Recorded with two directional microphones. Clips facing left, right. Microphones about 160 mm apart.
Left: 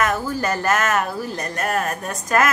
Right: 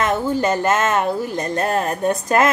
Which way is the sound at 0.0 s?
25° right (ahead or behind).